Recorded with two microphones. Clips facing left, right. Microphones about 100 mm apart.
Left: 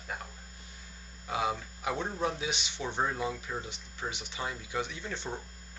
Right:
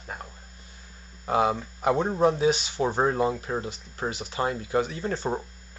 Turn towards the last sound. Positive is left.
turn(degrees=-40)  # may be behind; listen again after turning